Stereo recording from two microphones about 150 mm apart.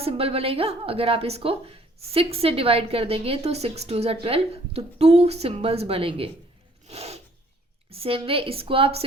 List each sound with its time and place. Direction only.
0.0 s a woman's voice: 40° right (ahead or behind)
6.8 s filing: 45° right (ahead or behind)
7.9 s a woman's voice: 40° right (ahead or behind)